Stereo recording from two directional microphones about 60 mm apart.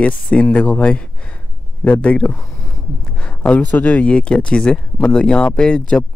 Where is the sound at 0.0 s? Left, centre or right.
Left.